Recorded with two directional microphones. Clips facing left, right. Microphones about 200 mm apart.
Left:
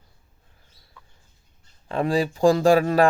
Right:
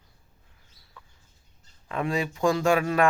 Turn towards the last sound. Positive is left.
turn(degrees=35)  # may be behind; listen again after turning